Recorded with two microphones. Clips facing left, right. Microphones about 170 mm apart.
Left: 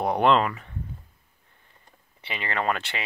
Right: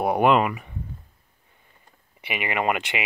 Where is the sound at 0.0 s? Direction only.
10° right (ahead or behind).